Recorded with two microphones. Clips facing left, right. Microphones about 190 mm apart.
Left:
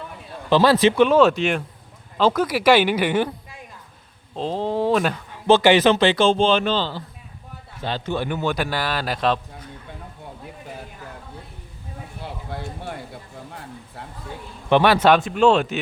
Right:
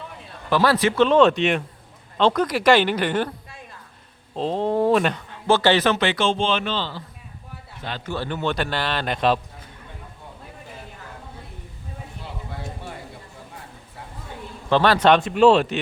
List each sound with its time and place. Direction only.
0.5 s speech: 20° left (ahead or behind)
1.0 s speech: 5° left (ahead or behind)
4.4 s speech: centre (ahead or behind)
5.3 s a man's voice: 15° left (ahead or behind)
8.1 s speech: 15° left (ahead or behind)
14.7 s speech: 10° left (ahead or behind)